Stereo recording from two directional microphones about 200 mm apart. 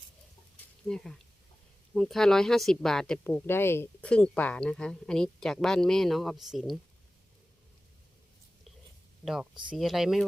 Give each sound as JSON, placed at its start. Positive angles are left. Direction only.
{"t": 0.9, "sound": "speech", "side_deg": 5}
{"t": 9.2, "sound": "speech", "side_deg": 0}